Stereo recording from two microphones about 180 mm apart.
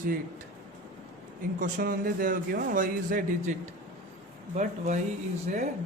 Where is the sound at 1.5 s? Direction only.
50° right (ahead or behind).